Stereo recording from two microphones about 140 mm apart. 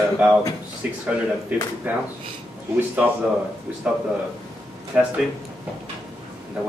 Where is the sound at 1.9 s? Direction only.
15° right (ahead or behind).